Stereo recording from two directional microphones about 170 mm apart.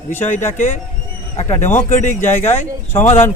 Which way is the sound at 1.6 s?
15° left (ahead or behind).